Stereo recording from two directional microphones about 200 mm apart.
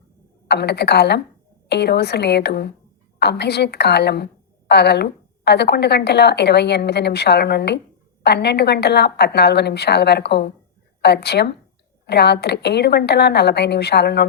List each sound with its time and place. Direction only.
0.4 s a woman's voice: 55° left (ahead or behind)